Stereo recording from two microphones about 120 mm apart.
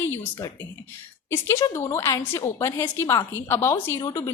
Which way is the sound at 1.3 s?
20° left (ahead or behind).